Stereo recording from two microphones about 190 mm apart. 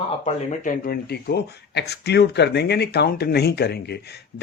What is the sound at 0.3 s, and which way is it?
Speech, 45° left (ahead or behind).